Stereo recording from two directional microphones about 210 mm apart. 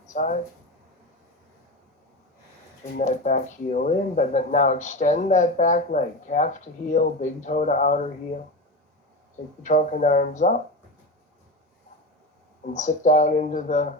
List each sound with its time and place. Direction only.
0.1 s speech: 35° left (ahead or behind)
3.0 s speech: 35° left (ahead or behind)
9.6 s speech: 35° left (ahead or behind)
12.7 s speech: 35° left (ahead or behind)